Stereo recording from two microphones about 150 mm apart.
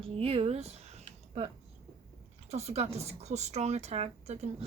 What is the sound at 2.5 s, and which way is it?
A woman's voice, 45° right (ahead or behind).